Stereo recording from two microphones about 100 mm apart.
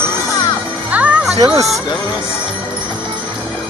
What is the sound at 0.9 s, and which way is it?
Music, 15° right (ahead or behind).